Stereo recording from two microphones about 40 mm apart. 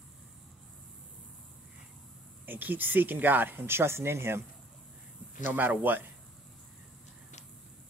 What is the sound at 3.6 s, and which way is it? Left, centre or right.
Speech, right.